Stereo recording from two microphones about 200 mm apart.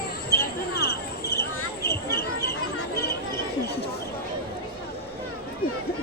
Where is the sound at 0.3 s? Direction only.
50° left (ahead or behind).